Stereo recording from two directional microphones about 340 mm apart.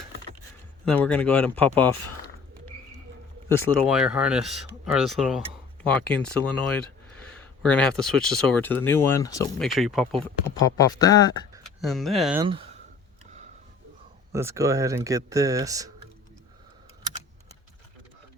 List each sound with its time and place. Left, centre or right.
0.9 s speech: centre
3.5 s speech: centre
7.6 s speech: centre
10.2 s speech: centre
11.5 s speech: centre
12.5 s speech: centre
14.3 s speech: centre